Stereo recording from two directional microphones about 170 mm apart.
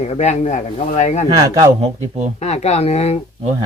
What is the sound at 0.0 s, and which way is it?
A man's voice, 40° left (ahead or behind).